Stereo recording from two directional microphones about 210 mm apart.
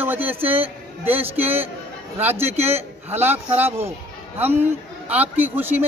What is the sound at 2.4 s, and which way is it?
Speech, 30° right (ahead or behind).